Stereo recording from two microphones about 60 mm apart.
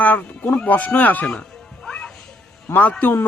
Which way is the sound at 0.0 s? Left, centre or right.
Left.